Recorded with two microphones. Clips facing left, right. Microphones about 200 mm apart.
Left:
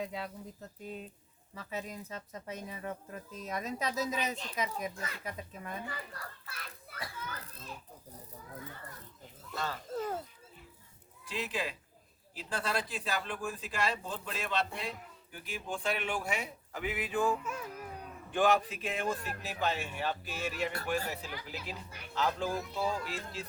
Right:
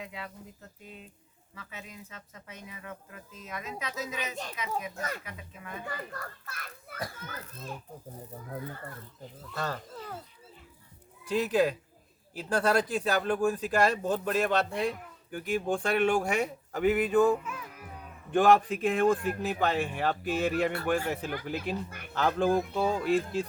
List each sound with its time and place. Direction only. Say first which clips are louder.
0.0 s speech: left 3 dB; 35° left (ahead or behind)
1.5 s speech: left 5 dB; 35° left (ahead or behind)
4.9 s speech: right 6 dB; 45° right (ahead or behind)
5.2 s speech: left 3 dB; 35° left (ahead or behind)
6.1 s speech: right 5 dB; 50° right (ahead or behind)
9.6 s speech: right 4 dB; 45° right (ahead or behind)
9.9 s a child's voice: left 6 dB; 45° left (ahead or behind)
11.3 s speech: right 11 dB; 45° right (ahead or behind)
17.4 s speech: left 2 dB; 40° left (ahead or behind)
18.3 s speech: right 6 dB; 45° right (ahead or behind)